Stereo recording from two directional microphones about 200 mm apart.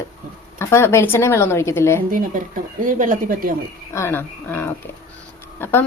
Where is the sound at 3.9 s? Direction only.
10° left (ahead or behind).